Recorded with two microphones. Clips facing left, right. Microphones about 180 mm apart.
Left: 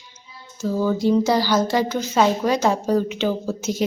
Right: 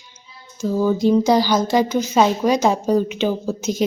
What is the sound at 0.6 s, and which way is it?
A woman's voice, 15° right (ahead or behind).